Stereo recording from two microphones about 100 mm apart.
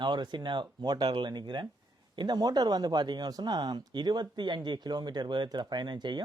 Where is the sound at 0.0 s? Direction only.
50° right (ahead or behind).